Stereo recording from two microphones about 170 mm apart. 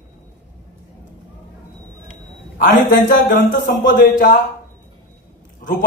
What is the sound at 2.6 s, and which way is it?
A man's voice, 50° left (ahead or behind).